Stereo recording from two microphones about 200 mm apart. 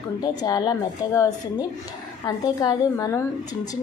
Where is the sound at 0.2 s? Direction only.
20° left (ahead or behind).